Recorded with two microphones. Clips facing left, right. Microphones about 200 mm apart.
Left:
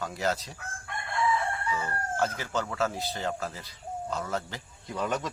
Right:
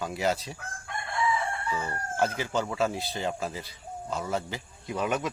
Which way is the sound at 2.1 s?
15° right (ahead or behind).